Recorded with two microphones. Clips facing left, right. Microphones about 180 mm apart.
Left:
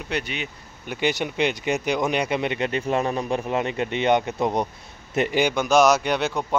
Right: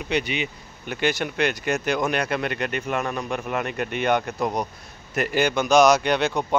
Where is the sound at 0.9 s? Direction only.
15° left (ahead or behind).